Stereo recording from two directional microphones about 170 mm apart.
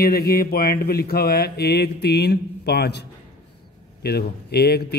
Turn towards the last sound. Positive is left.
turn(degrees=70)  # may be behind; listen again after turning